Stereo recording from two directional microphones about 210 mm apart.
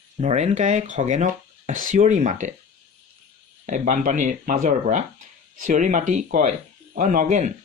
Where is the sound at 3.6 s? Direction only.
40° right (ahead or behind).